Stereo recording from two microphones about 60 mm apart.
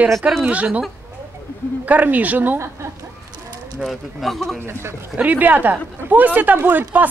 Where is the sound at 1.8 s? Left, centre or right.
Right.